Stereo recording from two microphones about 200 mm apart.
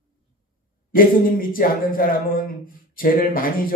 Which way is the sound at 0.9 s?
45° left (ahead or behind).